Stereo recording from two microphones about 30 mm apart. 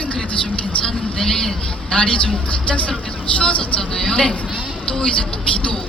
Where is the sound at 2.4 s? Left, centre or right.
Left.